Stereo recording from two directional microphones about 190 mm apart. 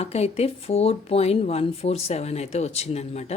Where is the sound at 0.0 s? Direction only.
35° left (ahead or behind).